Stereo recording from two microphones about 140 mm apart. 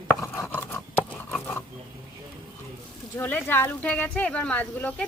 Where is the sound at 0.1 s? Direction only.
20° left (ahead or behind).